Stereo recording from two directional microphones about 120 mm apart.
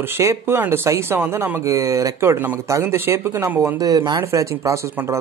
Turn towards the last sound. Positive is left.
turn(degrees=-25)  # may be behind; listen again after turning